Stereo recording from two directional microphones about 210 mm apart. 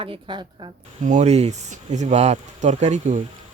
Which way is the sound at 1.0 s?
35° right (ahead or behind).